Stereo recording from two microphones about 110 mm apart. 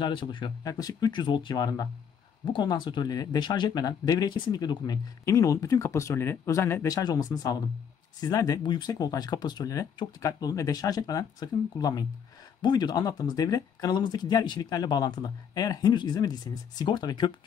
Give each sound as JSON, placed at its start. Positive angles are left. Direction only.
{"t": 0.0, "sound": "speech", "side_deg": 45}
{"t": 0.7, "sound": "speech", "side_deg": 35}